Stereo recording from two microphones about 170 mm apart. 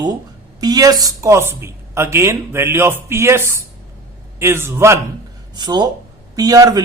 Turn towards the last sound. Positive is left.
turn(degrees=-20)  # may be behind; listen again after turning